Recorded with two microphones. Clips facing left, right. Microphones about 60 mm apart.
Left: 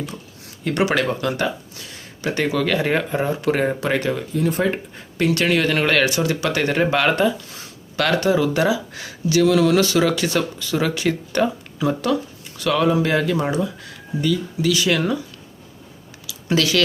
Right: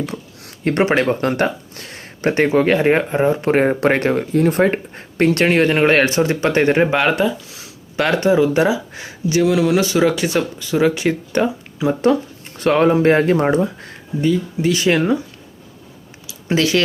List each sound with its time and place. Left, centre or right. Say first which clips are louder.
0.0 s a sound: right 5 dB; right
0.6 s speech: right 4 dB; right
7.2 s speech: right 1 dB; centre
7.9 s speech: right 3 dB; right
12.5 s speech: right 4 dB; right
16.2 s a sound: right 2 dB; right